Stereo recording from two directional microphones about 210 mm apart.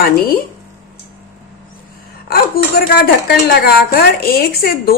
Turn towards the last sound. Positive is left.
turn(degrees=45)  # may be behind; listen again after turning